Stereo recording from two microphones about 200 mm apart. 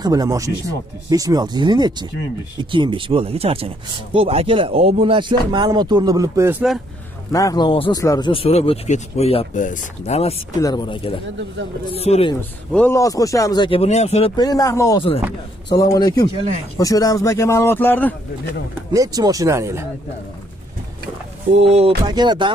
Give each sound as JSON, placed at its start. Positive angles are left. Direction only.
{"t": 0.0, "sound": "speech", "side_deg": -20}
{"t": 7.3, "sound": "speech", "side_deg": 20}
{"t": 8.3, "sound": "speech", "side_deg": 30}
{"t": 10.6, "sound": "speech", "side_deg": 20}
{"t": 12.4, "sound": "speech", "side_deg": 10}
{"t": 18.9, "sound": "speech", "side_deg": -20}
{"t": 21.5, "sound": "speech", "side_deg": -30}
{"t": 22.0, "sound": "speech", "side_deg": -20}